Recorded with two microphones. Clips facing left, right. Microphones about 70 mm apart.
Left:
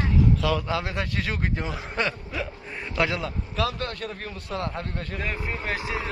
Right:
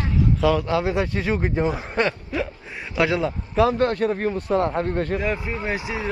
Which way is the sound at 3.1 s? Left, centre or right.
Right.